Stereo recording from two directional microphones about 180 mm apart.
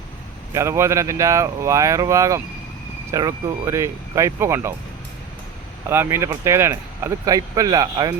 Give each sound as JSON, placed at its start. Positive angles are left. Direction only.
{"t": 0.5, "sound": "speech", "side_deg": -15}
{"t": 5.9, "sound": "speech", "side_deg": -15}